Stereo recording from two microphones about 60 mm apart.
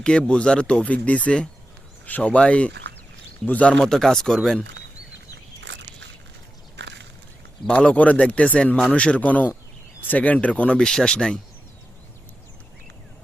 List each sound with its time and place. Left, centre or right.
0.0 s speech: centre
3.8 s speech: centre
7.7 s speech: centre